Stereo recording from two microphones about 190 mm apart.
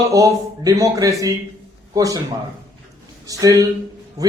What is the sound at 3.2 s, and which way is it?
Speech, 15° right (ahead or behind).